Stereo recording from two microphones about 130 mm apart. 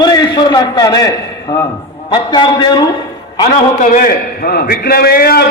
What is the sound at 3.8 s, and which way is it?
Speech, 90° left.